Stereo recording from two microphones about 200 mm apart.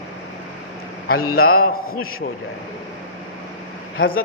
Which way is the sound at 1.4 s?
90° left.